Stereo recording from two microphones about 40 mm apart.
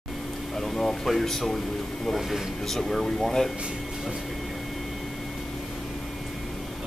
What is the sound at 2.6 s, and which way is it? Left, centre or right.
Speech, centre.